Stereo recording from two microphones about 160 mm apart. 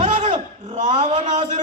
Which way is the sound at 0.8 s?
50° right (ahead or behind).